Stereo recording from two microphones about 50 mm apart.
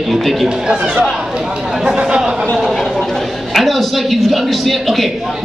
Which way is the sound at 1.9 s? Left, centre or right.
Centre.